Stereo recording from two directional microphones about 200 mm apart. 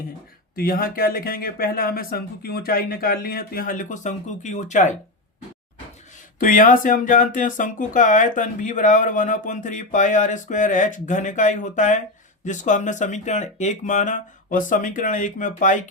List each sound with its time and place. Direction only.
0.5 s speech: 45° left (ahead or behind)
6.4 s speech: 40° left (ahead or behind)